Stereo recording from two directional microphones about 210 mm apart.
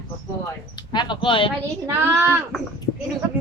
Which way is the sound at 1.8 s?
10° right (ahead or behind).